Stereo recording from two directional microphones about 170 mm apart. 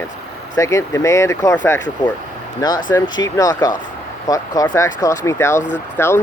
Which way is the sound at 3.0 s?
25° left (ahead or behind).